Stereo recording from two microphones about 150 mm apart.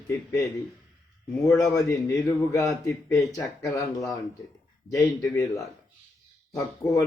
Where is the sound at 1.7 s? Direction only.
20° left (ahead or behind).